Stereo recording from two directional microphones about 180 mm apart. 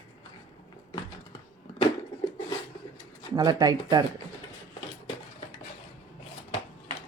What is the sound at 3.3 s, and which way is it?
Speech, 20° right (ahead or behind).